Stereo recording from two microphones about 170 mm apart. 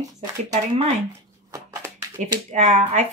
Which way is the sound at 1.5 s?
20° right (ahead or behind).